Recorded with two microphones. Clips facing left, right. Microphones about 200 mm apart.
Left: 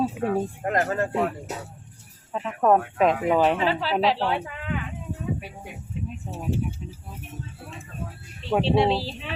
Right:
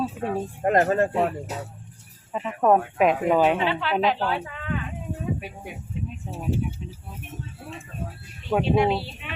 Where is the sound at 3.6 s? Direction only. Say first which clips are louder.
Left 1 dB; 35° left (ahead or behind).